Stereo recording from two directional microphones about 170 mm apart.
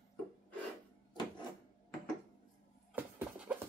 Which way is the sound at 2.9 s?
10° right (ahead or behind).